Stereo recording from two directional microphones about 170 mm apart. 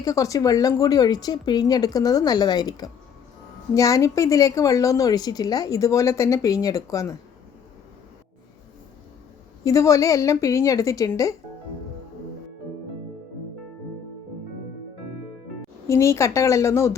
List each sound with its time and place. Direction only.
0.0 s a woman's voice: 20° left (ahead or behind)
9.6 s a woman's voice: 20° left (ahead or behind)
15.9 s speech: 15° left (ahead or behind)